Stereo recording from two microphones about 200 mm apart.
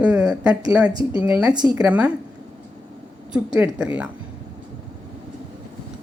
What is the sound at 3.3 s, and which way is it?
Speech, 5° right (ahead or behind).